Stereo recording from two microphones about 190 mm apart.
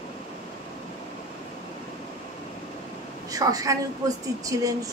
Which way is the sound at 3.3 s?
20° right (ahead or behind).